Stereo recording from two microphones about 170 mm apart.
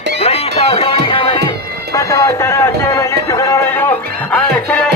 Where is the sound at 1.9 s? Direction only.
20° left (ahead or behind).